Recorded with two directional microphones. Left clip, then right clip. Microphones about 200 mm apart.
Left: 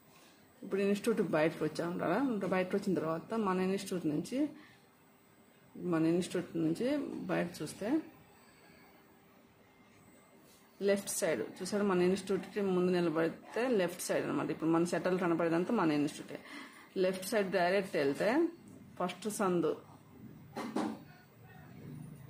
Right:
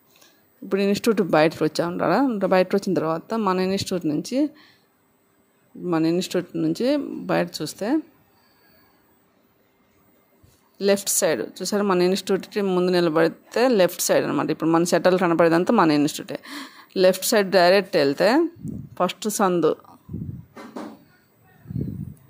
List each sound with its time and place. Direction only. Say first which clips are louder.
0.7 s speech: right 11 dB; 50° right (ahead or behind)
5.9 s speech: right 10 dB; 50° right (ahead or behind)
10.8 s speech: right 12 dB; 55° right (ahead or behind)